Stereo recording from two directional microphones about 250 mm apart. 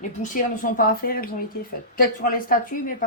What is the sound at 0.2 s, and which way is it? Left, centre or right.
A woman's voice, left.